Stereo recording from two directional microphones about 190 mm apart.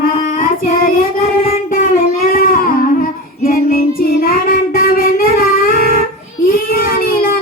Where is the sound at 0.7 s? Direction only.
50° left (ahead or behind).